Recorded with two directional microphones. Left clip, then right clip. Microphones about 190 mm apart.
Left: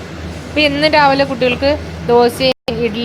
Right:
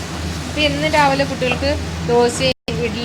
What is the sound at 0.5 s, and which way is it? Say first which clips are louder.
A woman's voice: left 5 dB; 40° left (ahead or behind).